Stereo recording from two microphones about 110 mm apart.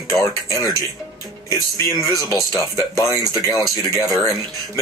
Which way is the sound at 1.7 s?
30° left (ahead or behind).